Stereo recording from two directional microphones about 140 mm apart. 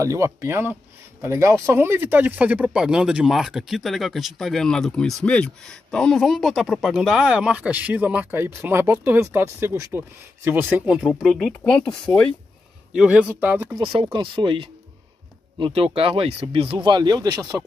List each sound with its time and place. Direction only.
0.0 s speech: 20° right (ahead or behind)
11.1 s speech: centre (ahead or behind)
12.9 s speech: 5° right (ahead or behind)
14.1 s speech: 35° right (ahead or behind)